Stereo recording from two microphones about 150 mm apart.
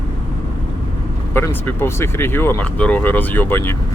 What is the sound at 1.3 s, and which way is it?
Speech, 15° left (ahead or behind).